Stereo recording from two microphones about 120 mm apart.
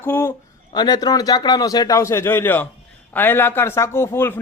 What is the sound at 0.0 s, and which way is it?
Speech, 20° left (ahead or behind).